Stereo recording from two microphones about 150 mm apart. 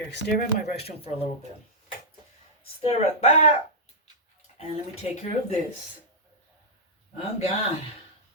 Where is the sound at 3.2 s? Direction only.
40° left (ahead or behind).